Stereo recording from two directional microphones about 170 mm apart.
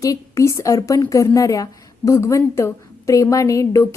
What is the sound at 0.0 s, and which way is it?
A woman's voice, 20° left (ahead or behind).